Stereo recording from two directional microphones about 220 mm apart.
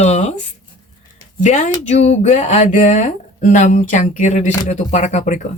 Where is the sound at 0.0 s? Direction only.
30° left (ahead or behind).